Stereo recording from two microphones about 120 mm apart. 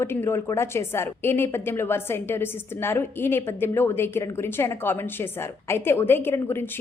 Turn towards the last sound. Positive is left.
turn(degrees=20)  # may be behind; listen again after turning